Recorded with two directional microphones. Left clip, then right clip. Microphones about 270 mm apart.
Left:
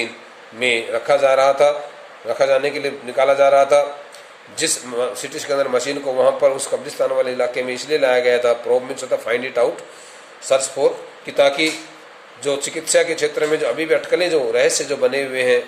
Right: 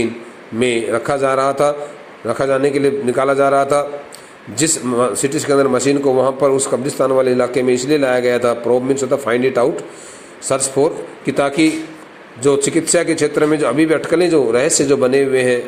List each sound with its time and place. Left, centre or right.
0.6 s a man's voice: centre
10.8 s a man's voice: centre